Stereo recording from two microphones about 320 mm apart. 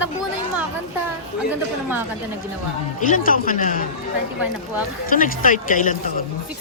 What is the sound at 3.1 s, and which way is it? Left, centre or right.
Speech, left.